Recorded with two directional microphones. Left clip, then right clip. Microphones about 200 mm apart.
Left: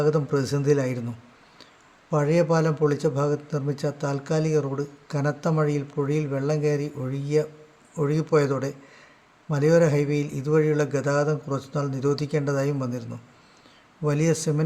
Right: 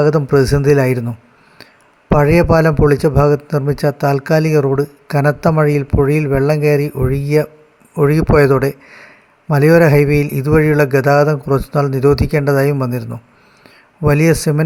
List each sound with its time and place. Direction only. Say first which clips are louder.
0.0 s a man's voice: right 11 dB; 40° right (ahead or behind)
2.1 s a man's voice: right 10 dB; 40° right (ahead or behind)